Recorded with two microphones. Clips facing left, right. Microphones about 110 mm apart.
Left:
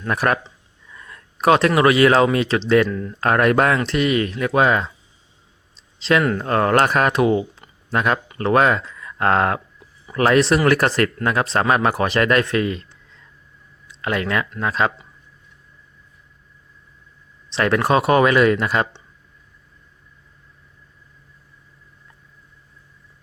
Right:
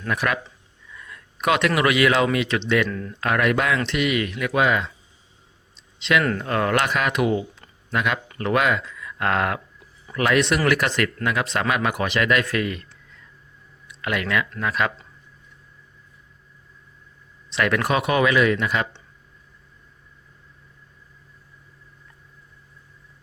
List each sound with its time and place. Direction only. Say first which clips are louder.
0.1 s speech: left 4 dB; 40° left (ahead or behind)
5.7 s a sound: left 3 dB; 35° left (ahead or behind)
6.4 s speech: left 5 dB; 35° left (ahead or behind)
12.5 s speech: left 4 dB; 25° left (ahead or behind)
17.5 s speech: left 4 dB; 30° left (ahead or behind)